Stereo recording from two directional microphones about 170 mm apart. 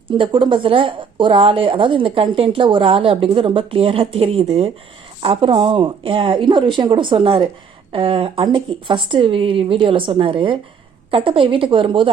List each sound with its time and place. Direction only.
0.1 s speech: 30° right (ahead or behind)